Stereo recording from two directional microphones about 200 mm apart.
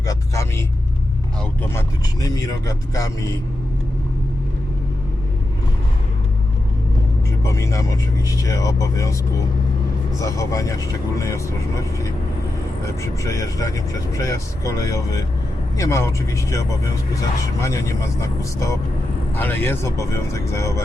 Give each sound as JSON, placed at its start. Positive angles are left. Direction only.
{"t": 0.1, "sound": "vehicle", "side_deg": 15}
{"t": 2.2, "sound": "speech", "side_deg": 15}
{"t": 7.4, "sound": "speech", "side_deg": 15}
{"t": 10.2, "sound": "speech", "side_deg": 15}
{"t": 12.8, "sound": "speech", "side_deg": 15}